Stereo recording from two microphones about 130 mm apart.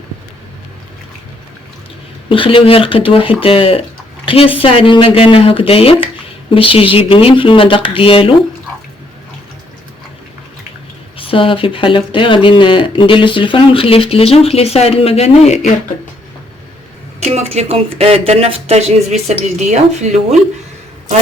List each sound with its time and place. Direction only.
2.3 s speech: 40° left (ahead or behind)
11.2 s speech: 45° left (ahead or behind); by 15.7 s 60° left (ahead or behind)
17.2 s speech: 55° right (ahead or behind)